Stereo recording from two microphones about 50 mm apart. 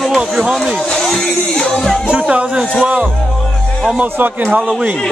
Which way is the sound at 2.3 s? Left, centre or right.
Right.